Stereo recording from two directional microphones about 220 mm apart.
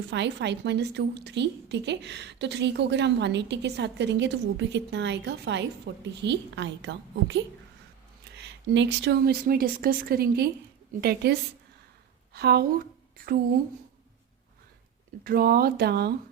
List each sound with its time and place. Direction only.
0.1 s a woman's voice: 55° right (ahead or behind)
8.4 s a woman's voice: 50° right (ahead or behind)
15.2 s a woman's voice: 40° right (ahead or behind)